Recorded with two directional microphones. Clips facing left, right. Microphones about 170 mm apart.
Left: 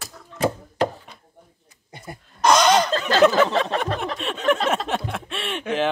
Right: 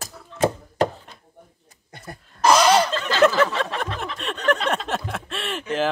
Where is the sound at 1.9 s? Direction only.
15° left (ahead or behind).